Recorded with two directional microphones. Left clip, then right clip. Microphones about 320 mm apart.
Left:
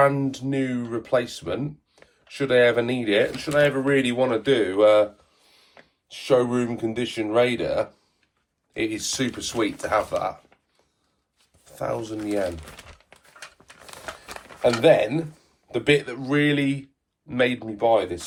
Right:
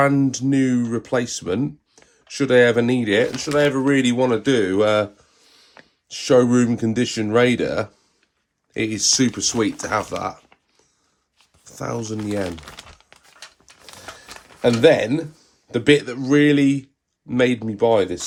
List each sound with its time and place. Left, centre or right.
0.0 s speech: right
6.1 s speech: right
11.6 s speech: right
12.7 s crumpling: centre
13.7 s a sound: centre
14.8 s speech: right